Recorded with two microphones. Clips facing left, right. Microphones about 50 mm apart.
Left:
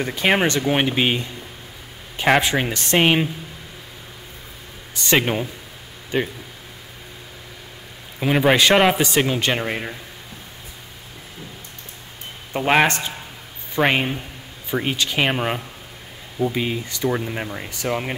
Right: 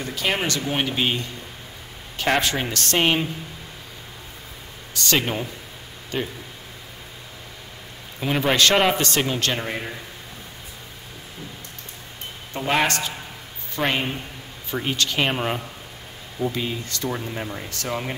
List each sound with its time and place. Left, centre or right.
0.0 s a man's voice: left
4.9 s a man's voice: left
8.2 s a man's voice: centre
12.5 s a man's voice: left